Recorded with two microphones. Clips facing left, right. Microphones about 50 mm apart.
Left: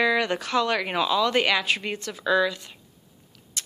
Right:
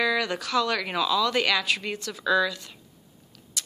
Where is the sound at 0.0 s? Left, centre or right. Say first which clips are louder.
Left 3 dB; left.